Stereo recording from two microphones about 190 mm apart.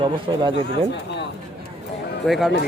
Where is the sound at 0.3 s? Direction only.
20° right (ahead or behind).